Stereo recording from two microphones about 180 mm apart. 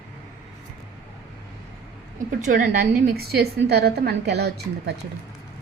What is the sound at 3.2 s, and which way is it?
A woman's voice, 60° right (ahead or behind).